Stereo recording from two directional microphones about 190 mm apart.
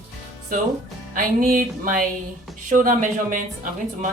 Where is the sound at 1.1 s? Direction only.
45° right (ahead or behind).